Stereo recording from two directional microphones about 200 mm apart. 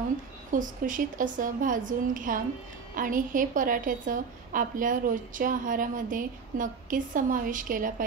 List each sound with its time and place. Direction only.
0.5 s a woman's voice: 40° right (ahead or behind)